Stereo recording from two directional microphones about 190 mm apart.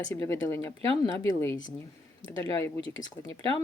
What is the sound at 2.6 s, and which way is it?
Speech, 20° left (ahead or behind).